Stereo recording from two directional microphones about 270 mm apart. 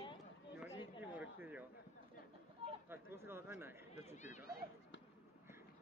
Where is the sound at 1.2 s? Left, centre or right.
Centre.